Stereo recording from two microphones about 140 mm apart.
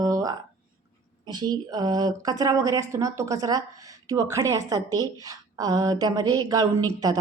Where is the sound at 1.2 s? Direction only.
30° right (ahead or behind).